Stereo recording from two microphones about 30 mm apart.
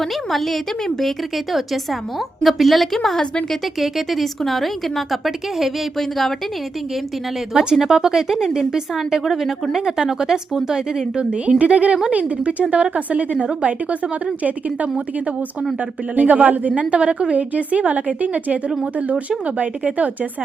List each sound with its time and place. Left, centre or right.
0.0 s a woman's voice: centre
1.5 s a woman's voice: centre
3.8 s a woman's voice: centre
6.0 s a woman's voice: centre
7.5 s speech: right
7.8 s speech: centre
9.2 s speech: centre
11.2 s a woman's voice: right
11.6 s a woman's voice: right
16.1 s a woman's voice: right
16.9 s a woman's voice: right
17.3 s a woman's voice: right